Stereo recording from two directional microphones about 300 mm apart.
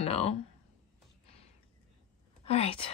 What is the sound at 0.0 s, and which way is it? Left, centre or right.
Speech, centre.